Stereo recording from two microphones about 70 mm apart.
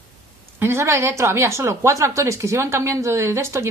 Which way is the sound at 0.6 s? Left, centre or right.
Right.